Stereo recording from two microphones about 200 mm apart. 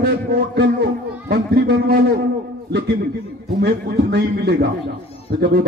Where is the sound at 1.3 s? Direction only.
50° right (ahead or behind).